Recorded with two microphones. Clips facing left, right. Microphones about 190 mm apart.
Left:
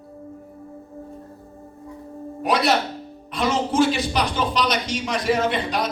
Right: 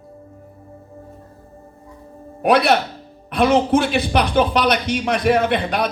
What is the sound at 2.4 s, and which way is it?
Speech, 60° right (ahead or behind).